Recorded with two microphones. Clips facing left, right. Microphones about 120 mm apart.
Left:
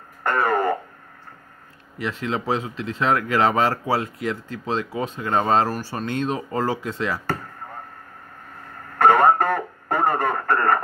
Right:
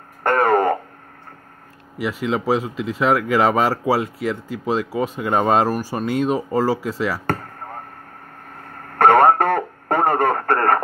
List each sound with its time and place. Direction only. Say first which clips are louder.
0.2 s radio: right 5 dB; 60° right (ahead or behind)
2.0 s a man's voice: right 4 dB; 10° right (ahead or behind)
8.8 s radio: right 3 dB; 60° right (ahead or behind)